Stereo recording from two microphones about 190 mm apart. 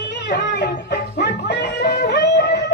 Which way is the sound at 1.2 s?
65° left (ahead or behind).